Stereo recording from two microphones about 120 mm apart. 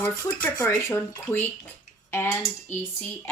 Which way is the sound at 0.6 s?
20° left (ahead or behind).